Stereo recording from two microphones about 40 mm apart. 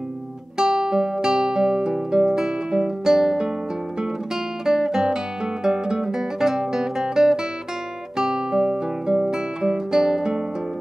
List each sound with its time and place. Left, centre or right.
0.6 s music: centre
4.6 s guitar: centre